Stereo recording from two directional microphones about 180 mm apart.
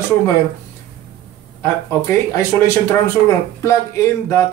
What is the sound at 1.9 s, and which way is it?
Speech, 15° left (ahead or behind).